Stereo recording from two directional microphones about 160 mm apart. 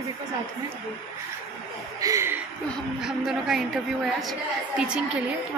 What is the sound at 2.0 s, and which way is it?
Speech, 20° right (ahead or behind).